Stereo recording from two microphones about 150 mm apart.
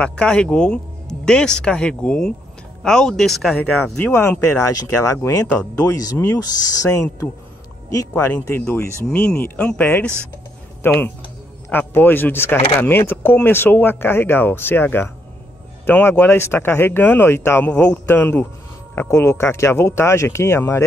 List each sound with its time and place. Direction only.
0.0 s speech: 5° left (ahead or behind)